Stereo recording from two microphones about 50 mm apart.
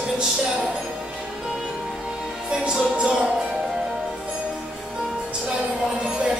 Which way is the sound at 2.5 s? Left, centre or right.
Centre.